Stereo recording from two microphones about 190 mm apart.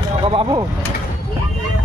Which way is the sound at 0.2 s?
25° right (ahead or behind).